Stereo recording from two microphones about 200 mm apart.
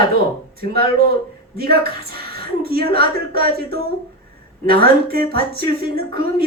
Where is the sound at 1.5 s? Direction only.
50° right (ahead or behind).